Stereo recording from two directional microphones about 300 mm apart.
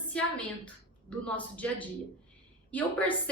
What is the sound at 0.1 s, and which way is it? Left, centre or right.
A woman's voice, centre.